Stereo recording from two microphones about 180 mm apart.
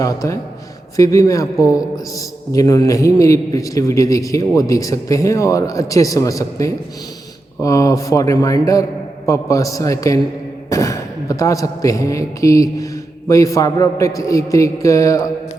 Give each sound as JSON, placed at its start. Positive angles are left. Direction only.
{"t": 0.0, "sound": "a man's voice", "side_deg": 20}